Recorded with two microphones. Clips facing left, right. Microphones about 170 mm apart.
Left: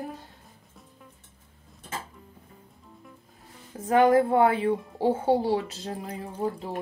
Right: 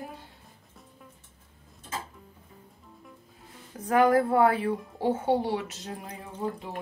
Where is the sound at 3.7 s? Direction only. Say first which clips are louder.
Left 2 dB; 25° left (ahead or behind).